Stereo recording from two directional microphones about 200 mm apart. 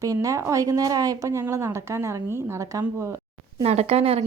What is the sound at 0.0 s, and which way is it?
Speech, 15° right (ahead or behind).